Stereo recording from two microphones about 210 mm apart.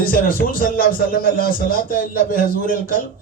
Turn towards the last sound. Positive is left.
turn(degrees=40)  # may be behind; listen again after turning